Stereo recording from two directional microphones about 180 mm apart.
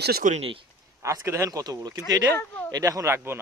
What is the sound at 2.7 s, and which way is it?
Speech, 20° right (ahead or behind).